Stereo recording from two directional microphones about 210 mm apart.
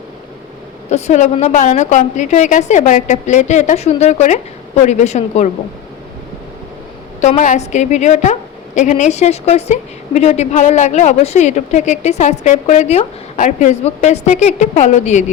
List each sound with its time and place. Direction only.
0.9 s a woman's voice: 30° left (ahead or behind)
7.2 s a woman's voice: 35° left (ahead or behind)